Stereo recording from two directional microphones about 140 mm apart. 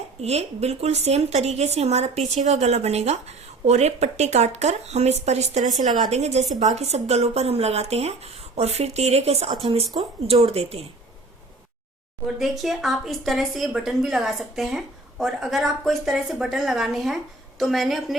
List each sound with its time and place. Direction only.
0.2 s a woman's voice: 50° right (ahead or behind)
12.4 s a woman's voice: centre (ahead or behind)